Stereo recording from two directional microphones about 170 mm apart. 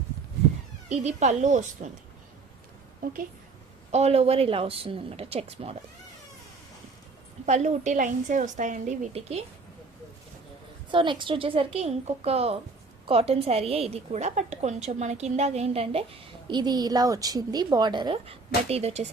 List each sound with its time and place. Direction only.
0.9 s a woman's voice: 45° right (ahead or behind)
3.0 s a woman's voice: 55° right (ahead or behind)
3.9 s a woman's voice: 40° right (ahead or behind)
7.4 s a woman's voice: 40° right (ahead or behind)
10.9 s a woman's voice: 30° right (ahead or behind)
16.5 s a woman's voice: 25° right (ahead or behind)